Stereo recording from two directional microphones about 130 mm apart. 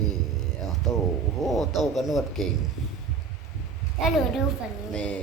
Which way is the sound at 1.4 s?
Centre (ahead or behind).